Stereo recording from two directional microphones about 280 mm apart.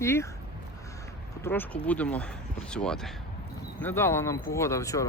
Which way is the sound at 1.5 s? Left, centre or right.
Centre.